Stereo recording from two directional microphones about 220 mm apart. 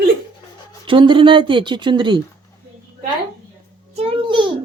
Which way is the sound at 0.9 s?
20° right (ahead or behind).